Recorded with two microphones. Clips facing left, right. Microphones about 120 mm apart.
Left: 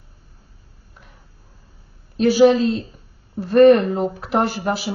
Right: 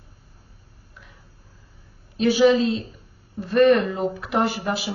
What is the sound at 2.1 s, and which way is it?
Speech, 40° left (ahead or behind).